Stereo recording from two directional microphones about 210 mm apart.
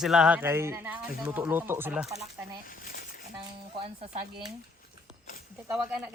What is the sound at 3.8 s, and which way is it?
Speech, 30° right (ahead or behind).